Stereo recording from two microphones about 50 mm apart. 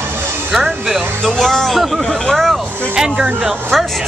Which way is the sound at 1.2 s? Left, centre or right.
Centre.